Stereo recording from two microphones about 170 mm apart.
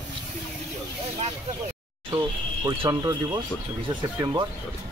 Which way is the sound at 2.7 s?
25° right (ahead or behind).